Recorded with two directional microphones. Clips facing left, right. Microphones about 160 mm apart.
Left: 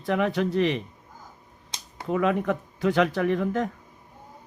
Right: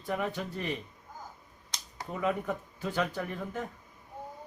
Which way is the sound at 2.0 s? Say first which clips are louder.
Left 8 dB; 85° left.